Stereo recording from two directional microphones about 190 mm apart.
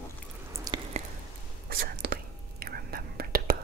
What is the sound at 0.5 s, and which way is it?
Drip, 20° right (ahead or behind).